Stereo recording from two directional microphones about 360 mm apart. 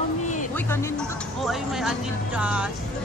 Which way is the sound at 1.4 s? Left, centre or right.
Centre.